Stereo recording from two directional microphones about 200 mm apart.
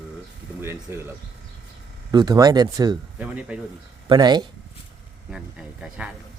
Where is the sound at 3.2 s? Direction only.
5° right (ahead or behind).